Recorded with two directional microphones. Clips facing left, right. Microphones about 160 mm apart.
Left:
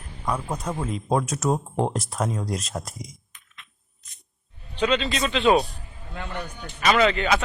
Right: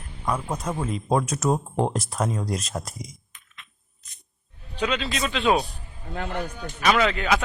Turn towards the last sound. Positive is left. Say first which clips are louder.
# left 2 dB
turn(degrees=0)  # may be behind; listen again after turning